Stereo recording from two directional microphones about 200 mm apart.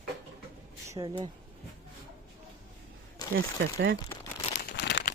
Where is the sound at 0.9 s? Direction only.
20° right (ahead or behind).